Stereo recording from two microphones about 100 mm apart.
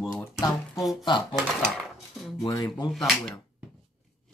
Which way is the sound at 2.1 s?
Centre (ahead or behind).